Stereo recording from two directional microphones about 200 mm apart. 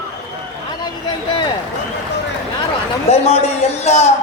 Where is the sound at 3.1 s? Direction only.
30° left (ahead or behind).